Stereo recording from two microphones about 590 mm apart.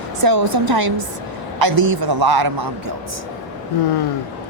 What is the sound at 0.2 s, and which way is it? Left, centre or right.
Speech, right.